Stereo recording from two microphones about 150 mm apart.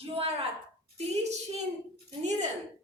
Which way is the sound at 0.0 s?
40° right (ahead or behind).